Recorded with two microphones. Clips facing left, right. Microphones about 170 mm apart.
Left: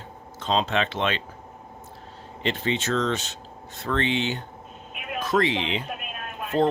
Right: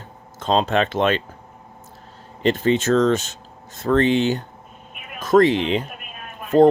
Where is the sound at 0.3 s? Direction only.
50° right (ahead or behind).